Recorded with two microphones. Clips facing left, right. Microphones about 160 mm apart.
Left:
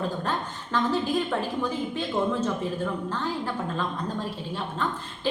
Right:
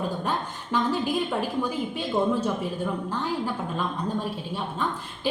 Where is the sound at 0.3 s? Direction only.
10° right (ahead or behind).